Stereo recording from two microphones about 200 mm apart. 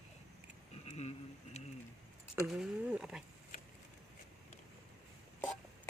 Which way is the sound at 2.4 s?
5° right (ahead or behind).